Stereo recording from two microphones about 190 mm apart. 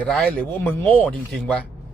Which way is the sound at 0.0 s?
5° left (ahead or behind).